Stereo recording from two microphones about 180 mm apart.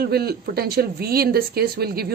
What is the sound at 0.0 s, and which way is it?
Speech, 60° right (ahead or behind).